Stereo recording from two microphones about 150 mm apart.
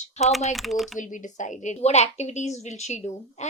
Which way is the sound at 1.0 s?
60° left (ahead or behind).